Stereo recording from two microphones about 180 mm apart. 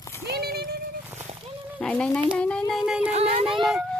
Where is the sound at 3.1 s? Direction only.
35° right (ahead or behind).